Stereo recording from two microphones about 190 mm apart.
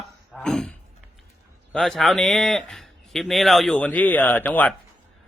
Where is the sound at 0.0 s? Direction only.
Centre (ahead or behind).